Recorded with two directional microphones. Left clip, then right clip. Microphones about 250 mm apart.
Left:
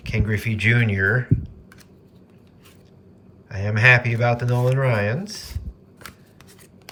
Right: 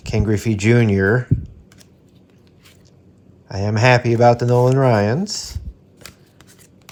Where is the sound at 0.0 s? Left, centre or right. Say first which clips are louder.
Right 5 dB; centre.